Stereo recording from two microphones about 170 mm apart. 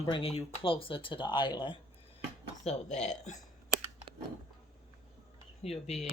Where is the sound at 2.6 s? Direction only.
40° left (ahead or behind).